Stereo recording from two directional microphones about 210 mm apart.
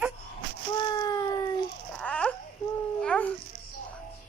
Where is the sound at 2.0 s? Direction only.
5° left (ahead or behind).